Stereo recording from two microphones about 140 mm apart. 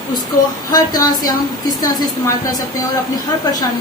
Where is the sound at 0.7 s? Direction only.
25° left (ahead or behind).